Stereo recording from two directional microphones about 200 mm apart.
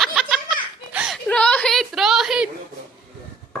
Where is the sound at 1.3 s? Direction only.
5° left (ahead or behind).